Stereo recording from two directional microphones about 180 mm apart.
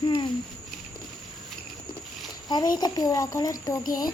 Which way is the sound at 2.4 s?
25° left (ahead or behind).